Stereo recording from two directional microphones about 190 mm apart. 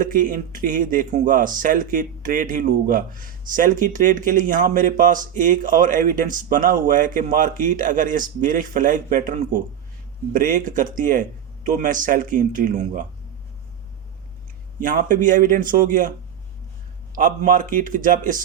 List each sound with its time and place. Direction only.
0.0 s speech: 45° right (ahead or behind)
14.8 s speech: 45° right (ahead or behind)
17.2 s speech: 45° right (ahead or behind)